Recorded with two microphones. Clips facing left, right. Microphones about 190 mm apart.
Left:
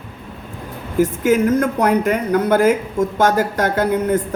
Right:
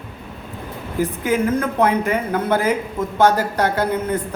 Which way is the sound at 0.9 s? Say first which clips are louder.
Left 5 dB; 45° left (ahead or behind).